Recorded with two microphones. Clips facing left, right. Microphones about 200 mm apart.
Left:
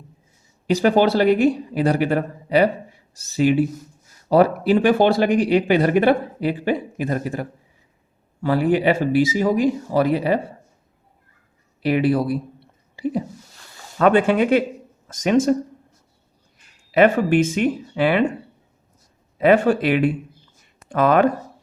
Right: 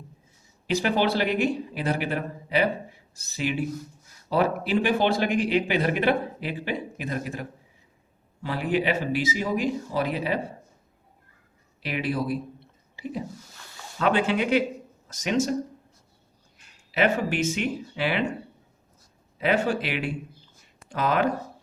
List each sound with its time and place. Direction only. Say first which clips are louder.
0.8 s speech: left 8 dB; 45° left (ahead or behind)
11.9 s speech: left 9 dB; 50° left (ahead or behind)
14.0 s speech: left 8 dB; 55° left (ahead or behind)
16.9 s speech: left 9 dB; 55° left (ahead or behind)
19.4 s speech: left 9 dB; 55° left (ahead or behind)